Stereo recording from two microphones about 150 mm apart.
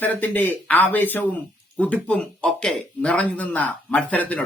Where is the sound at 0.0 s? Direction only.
10° left (ahead or behind).